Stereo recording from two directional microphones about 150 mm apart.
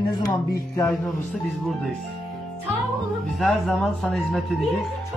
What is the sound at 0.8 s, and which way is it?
Speech, 5° left (ahead or behind).